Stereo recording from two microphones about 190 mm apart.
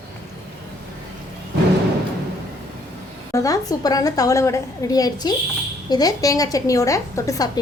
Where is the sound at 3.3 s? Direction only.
20° left (ahead or behind).